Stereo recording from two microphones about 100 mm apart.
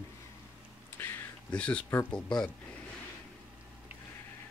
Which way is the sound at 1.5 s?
10° left (ahead or behind).